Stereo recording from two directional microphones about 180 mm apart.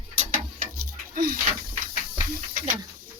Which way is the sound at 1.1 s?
55° right (ahead or behind).